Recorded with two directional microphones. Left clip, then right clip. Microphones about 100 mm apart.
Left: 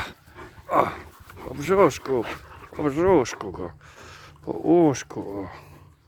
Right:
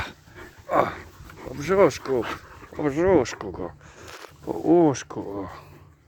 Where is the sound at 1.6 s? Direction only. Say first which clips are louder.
Even; 25° left (ahead or behind).